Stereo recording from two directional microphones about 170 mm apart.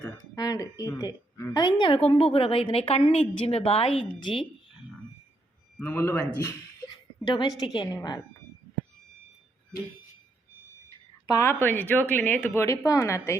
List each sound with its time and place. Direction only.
0.3 s a woman's voice: 20° left (ahead or behind)
5.8 s a woman's voice: 15° left (ahead or behind)
11.3 s a woman's voice: 15° left (ahead or behind)